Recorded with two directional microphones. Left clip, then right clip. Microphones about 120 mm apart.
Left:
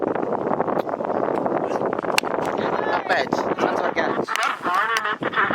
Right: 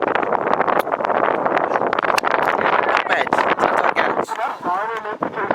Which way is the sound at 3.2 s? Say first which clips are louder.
Right 6 dB; 25° right (ahead or behind).